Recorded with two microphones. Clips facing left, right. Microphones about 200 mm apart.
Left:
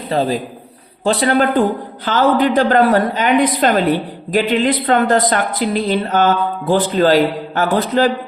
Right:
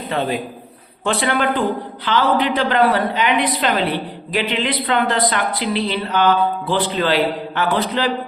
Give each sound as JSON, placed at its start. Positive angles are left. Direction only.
{"t": 0.1, "sound": "a woman's voice", "side_deg": 35}